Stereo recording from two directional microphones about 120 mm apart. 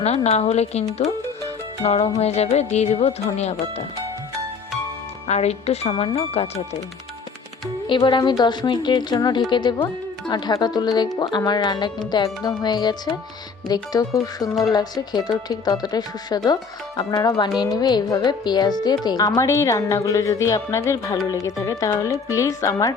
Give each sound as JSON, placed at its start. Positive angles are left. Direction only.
{"t": 0.0, "sound": "speech", "side_deg": 65}
{"t": 5.3, "sound": "speech", "side_deg": 65}
{"t": 7.9, "sound": "speech", "side_deg": 40}